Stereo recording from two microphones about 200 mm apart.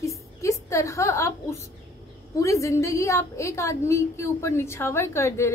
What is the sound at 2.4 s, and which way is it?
A woman's voice, 15° left (ahead or behind).